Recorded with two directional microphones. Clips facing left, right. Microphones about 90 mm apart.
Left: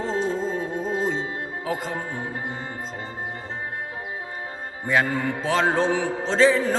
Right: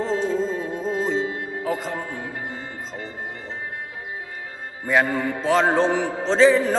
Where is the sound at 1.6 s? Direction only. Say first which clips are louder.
Right 2 dB; centre (ahead or behind).